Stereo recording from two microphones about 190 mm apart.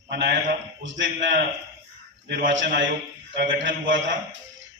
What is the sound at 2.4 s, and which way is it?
A man's voice, 70° right (ahead or behind).